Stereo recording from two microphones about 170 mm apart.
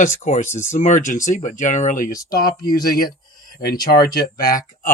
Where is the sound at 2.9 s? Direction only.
60° left (ahead or behind).